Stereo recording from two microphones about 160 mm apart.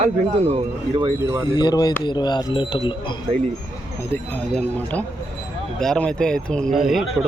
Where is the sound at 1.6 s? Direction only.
25° left (ahead or behind).